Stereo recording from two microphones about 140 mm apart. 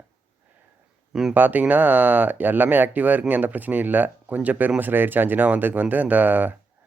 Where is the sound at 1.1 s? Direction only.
10° right (ahead or behind).